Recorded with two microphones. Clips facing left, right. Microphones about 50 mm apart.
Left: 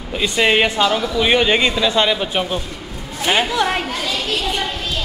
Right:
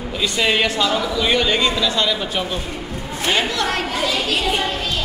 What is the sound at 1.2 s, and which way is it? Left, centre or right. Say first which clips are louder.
Speech: left 4 dB; left.